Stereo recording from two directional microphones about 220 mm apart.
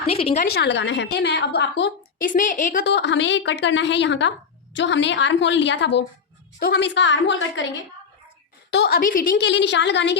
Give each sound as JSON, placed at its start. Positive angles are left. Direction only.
{"t": 0.1, "sound": "a woman's voice", "side_deg": 25}
{"t": 0.4, "sound": "a woman's voice", "side_deg": 50}
{"t": 2.3, "sound": "a woman's voice", "side_deg": 35}
{"t": 2.8, "sound": "a woman's voice", "side_deg": 50}
{"t": 8.7, "sound": "a woman's voice", "side_deg": 45}